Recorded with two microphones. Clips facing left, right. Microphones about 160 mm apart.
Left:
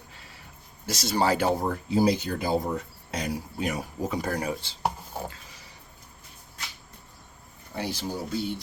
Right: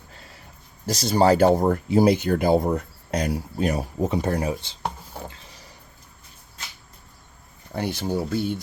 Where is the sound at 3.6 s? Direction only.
35° right (ahead or behind).